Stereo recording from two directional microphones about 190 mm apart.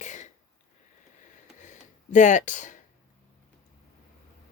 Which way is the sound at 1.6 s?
40° left (ahead or behind).